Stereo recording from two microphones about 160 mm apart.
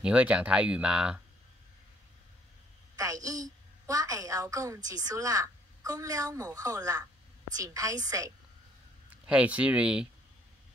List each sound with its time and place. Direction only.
0.0 s speech: 10° right (ahead or behind)
3.8 s a woman's voice: 20° right (ahead or behind)
9.2 s speech: 5° right (ahead or behind)